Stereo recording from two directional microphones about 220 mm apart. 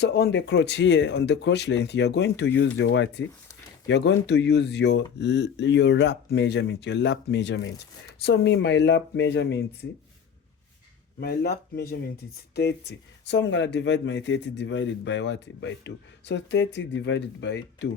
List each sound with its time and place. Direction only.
0.0 s speech: 50° left (ahead or behind)
11.2 s speech: 45° left (ahead or behind)